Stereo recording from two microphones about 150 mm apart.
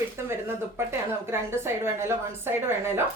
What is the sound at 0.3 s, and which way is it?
A woman's voice, 15° right (ahead or behind).